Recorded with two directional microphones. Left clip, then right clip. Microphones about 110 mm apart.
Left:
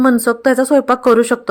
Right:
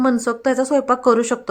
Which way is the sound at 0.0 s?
45° left (ahead or behind).